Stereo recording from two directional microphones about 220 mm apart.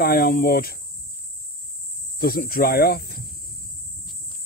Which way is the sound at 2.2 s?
45° left (ahead or behind).